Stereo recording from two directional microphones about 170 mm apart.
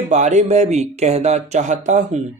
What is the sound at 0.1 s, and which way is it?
A man's voice, 45° right (ahead or behind).